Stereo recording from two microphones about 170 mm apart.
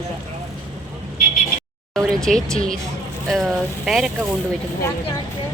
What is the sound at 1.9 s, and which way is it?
Speech, centre (ahead or behind).